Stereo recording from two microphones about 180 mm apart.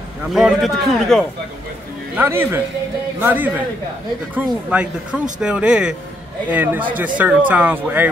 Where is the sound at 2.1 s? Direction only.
15° right (ahead or behind).